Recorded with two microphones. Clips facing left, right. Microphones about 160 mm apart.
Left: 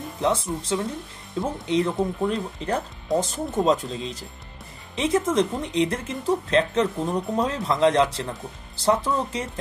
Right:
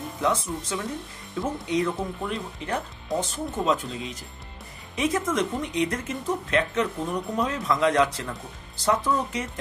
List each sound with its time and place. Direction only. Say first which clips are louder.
0.2 s speech: left 2 dB; 30° left (ahead or behind)